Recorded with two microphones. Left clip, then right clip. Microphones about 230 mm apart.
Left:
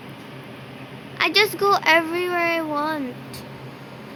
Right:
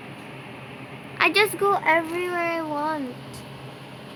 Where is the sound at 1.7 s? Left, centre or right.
Left.